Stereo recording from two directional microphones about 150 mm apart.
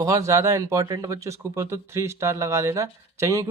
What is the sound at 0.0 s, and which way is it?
Speech, 20° right (ahead or behind).